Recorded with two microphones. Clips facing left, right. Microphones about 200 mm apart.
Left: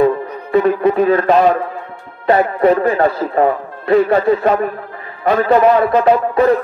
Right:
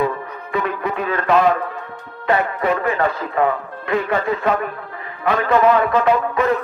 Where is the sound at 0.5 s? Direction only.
40° left (ahead or behind).